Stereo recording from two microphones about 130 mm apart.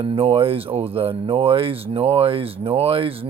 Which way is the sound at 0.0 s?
45° right (ahead or behind).